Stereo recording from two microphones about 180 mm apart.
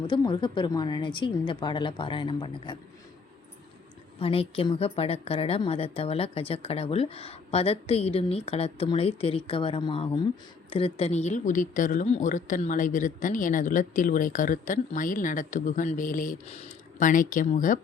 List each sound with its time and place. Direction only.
0.1 s a woman's voice: 25° left (ahead or behind)
4.2 s a woman's voice: 30° left (ahead or behind)